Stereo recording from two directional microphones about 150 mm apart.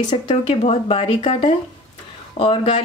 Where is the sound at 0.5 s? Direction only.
40° left (ahead or behind).